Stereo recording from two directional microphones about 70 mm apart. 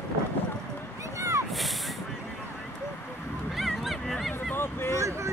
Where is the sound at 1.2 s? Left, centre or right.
Right.